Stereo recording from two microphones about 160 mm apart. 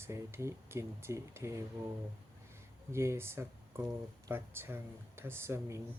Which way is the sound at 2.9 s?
15° right (ahead or behind).